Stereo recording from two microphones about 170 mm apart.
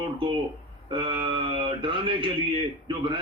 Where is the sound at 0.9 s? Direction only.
30° right (ahead or behind).